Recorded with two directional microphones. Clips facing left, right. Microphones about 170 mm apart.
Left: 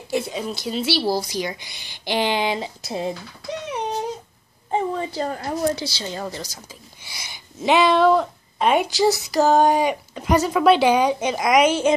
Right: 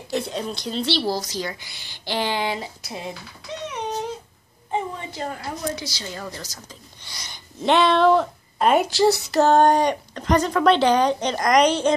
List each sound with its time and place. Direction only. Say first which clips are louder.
0.1 s a woman's voice: left 1 dB; 5° left (ahead or behind); by 3.1 s 30° left (ahead or behind)
4.6 s a woman's voice: left 4 dB; 35° left (ahead or behind)
6.4 s speech: left 2 dB; 10° left (ahead or behind)